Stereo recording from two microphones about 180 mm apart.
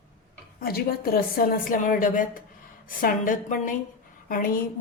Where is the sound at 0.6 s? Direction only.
55° left (ahead or behind).